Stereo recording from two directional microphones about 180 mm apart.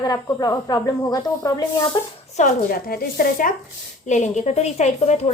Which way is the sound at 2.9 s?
55° left (ahead or behind).